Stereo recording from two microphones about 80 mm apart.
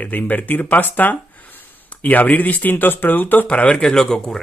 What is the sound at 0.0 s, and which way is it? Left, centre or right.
Speech, left.